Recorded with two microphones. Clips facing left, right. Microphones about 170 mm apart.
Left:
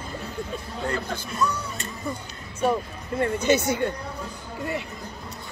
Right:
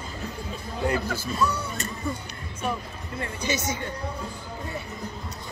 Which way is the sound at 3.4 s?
60° left (ahead or behind).